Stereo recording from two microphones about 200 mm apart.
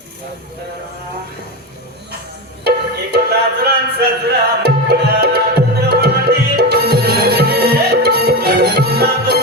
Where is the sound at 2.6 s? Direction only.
55° right (ahead or behind).